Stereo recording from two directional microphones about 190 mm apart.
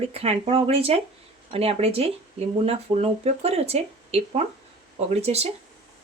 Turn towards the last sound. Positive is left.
turn(degrees=-35)  # may be behind; listen again after turning